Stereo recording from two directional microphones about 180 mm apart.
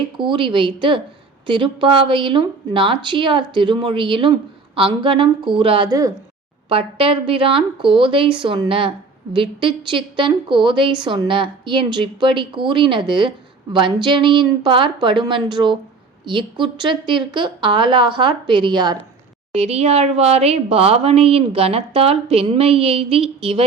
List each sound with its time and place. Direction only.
0.2 s a woman's voice: 25° right (ahead or behind)
6.7 s a woman's voice: 30° right (ahead or behind)
19.5 s a woman's voice: 35° right (ahead or behind)